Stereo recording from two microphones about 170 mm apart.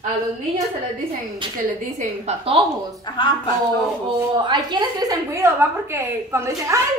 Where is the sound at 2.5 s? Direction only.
30° right (ahead or behind).